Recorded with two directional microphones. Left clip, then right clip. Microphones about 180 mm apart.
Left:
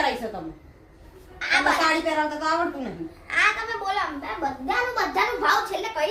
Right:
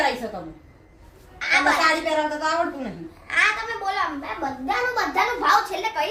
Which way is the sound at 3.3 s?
10° right (ahead or behind).